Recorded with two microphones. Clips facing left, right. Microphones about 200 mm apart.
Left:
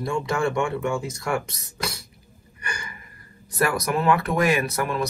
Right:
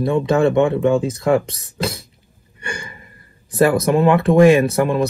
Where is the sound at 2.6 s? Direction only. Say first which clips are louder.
Right 6 dB; 25° right (ahead or behind).